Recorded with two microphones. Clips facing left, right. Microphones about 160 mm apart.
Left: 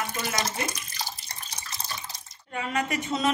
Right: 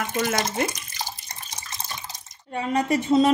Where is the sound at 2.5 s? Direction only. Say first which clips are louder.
Right 6 dB; 35° right (ahead or behind).